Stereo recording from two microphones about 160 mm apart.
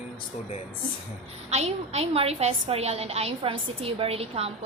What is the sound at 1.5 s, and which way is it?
A woman's voice, 40° right (ahead or behind).